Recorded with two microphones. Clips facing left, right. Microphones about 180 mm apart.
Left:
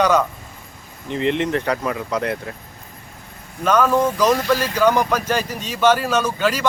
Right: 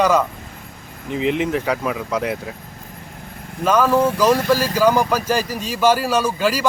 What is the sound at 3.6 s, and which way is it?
A man's voice, 5° right (ahead or behind).